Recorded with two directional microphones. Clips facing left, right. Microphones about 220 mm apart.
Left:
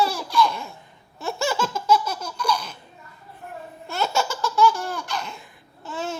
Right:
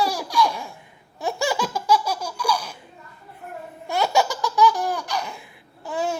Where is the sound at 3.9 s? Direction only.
15° right (ahead or behind).